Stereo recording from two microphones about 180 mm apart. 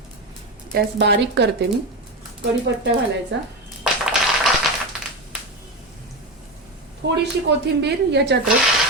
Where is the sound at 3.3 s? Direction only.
70° right (ahead or behind).